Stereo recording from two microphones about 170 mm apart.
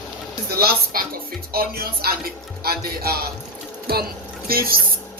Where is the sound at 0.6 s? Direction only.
60° right (ahead or behind).